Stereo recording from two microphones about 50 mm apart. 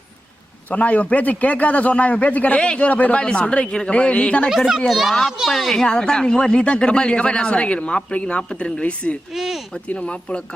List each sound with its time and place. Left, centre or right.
0.7 s speech: left
4.4 s a woman's voice: centre
5.8 s speech: centre
9.3 s speech: centre
9.7 s speech: left